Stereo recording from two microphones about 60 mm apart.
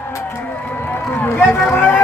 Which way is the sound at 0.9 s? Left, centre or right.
Left.